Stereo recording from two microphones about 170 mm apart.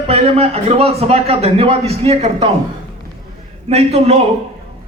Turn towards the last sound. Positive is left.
turn(degrees=-35)  # may be behind; listen again after turning